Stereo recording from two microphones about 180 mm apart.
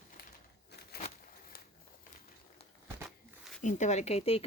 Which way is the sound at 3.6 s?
40° left (ahead or behind).